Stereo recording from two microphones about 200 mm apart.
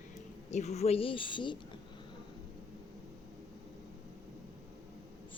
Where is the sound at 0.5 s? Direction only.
35° left (ahead or behind).